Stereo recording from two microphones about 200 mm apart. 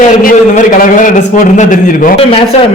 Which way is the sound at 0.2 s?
45° left (ahead or behind).